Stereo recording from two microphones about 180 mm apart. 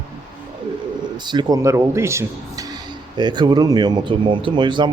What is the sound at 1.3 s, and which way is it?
Speech, 25° right (ahead or behind).